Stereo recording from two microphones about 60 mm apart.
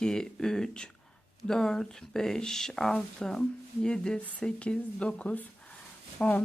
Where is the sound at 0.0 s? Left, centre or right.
Centre.